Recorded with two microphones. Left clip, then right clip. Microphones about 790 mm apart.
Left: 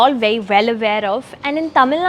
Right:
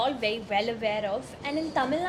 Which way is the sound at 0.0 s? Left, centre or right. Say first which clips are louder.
Left 14 dB; left.